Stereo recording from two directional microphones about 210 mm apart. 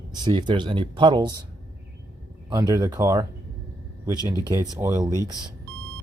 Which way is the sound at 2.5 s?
15° right (ahead or behind).